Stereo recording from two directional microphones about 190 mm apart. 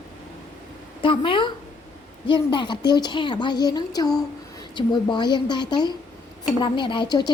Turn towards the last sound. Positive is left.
turn(degrees=25)  # may be behind; listen again after turning